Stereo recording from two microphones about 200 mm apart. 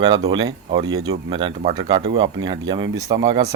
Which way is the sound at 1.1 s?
25° right (ahead or behind).